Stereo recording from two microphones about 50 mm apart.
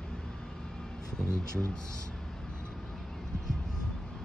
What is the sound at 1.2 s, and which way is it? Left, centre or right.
Speech, right.